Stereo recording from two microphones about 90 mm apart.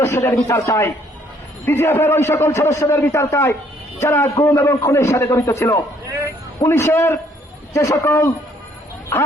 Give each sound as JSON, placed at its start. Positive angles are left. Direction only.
{"t": 0.0, "sound": "a man's voice", "side_deg": 25}